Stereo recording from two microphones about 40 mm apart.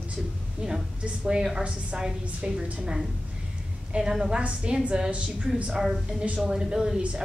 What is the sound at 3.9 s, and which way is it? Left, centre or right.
Speech, centre.